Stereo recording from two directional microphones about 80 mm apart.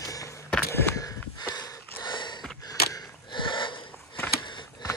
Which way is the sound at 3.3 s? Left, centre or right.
Left.